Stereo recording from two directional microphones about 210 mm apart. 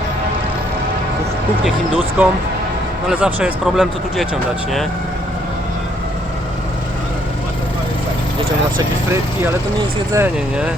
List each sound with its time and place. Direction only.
2.2 s speech: 5° right (ahead or behind)
10.1 s speech: 10° right (ahead or behind)